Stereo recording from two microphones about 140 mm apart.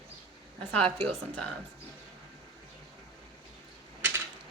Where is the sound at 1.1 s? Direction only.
5° left (ahead or behind).